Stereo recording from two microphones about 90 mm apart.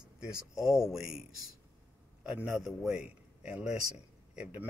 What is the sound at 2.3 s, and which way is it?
Speech, 15° right (ahead or behind).